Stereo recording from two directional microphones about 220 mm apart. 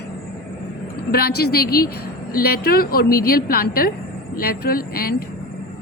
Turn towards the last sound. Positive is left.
turn(degrees=45)  # may be behind; listen again after turning